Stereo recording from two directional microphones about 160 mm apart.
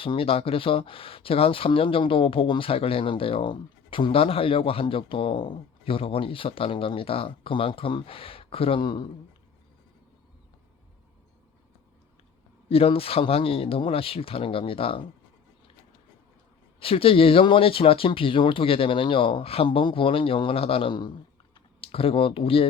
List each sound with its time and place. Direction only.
0.0 s speech: 35° left (ahead or behind)
12.6 s speech: 35° left (ahead or behind)
16.8 s speech: 35° left (ahead or behind)
21.5 s typing: 35° left (ahead or behind)